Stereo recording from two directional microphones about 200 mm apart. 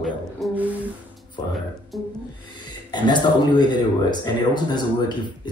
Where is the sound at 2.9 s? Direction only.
20° left (ahead or behind).